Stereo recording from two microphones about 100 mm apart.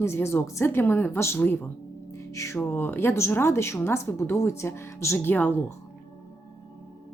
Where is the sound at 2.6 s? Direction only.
20° left (ahead or behind).